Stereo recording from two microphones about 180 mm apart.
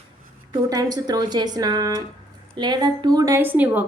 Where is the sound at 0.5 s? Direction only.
20° right (ahead or behind).